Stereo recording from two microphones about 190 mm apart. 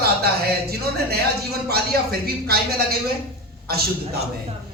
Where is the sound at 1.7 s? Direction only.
55° right (ahead or behind).